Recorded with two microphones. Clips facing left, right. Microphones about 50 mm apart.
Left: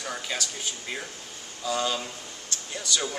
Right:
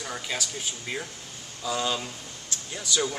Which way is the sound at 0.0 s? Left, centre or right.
Centre.